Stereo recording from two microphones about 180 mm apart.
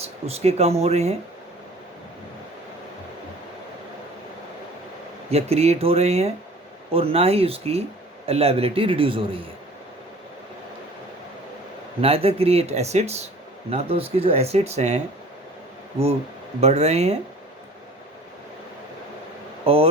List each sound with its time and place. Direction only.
0.0 s speech: 35° right (ahead or behind)
5.3 s speech: 35° right (ahead or behind)
11.9 s speech: 35° right (ahead or behind)
16.6 s speech: 35° right (ahead or behind)
19.6 s speech: 30° right (ahead or behind)